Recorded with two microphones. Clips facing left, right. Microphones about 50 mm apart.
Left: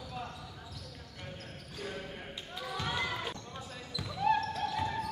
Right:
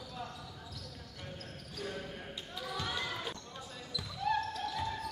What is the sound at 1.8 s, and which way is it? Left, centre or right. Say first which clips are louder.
Basketball bounce: even; centre.